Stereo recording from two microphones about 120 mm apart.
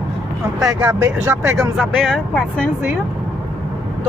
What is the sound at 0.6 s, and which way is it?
Speech, 10° right (ahead or behind).